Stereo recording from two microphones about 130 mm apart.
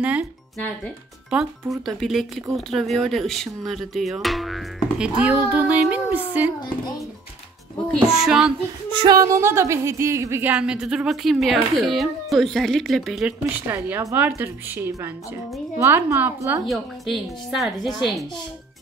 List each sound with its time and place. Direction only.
0.0 s speech: 10° right (ahead or behind)
2.0 s speech: centre (ahead or behind)
7.9 s speech: 5° right (ahead or behind)
8.9 s speech: 30° right (ahead or behind)
10.5 s speech: 5° right (ahead or behind)
13.5 s a woman's voice: 15° right (ahead or behind)
16.6 s speech: centre (ahead or behind)